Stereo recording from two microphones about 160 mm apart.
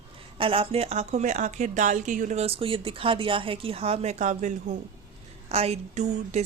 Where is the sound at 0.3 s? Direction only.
35° right (ahead or behind).